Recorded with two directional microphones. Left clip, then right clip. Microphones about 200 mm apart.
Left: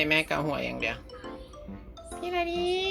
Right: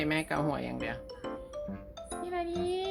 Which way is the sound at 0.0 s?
20° right (ahead or behind).